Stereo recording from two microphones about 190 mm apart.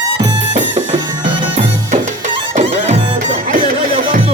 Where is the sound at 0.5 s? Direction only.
35° right (ahead or behind).